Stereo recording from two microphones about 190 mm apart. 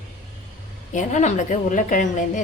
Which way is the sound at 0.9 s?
40° left (ahead or behind).